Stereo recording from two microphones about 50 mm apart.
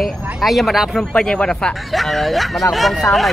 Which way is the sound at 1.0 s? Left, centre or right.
Centre.